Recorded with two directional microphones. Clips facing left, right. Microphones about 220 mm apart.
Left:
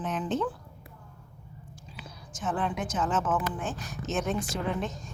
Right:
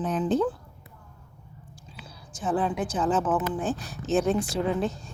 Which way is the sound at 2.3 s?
35° right (ahead or behind).